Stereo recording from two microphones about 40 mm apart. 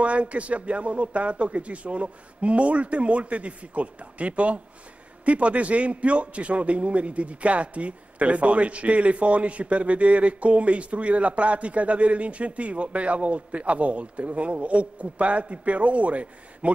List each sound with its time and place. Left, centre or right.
0.0 s a man's voice: right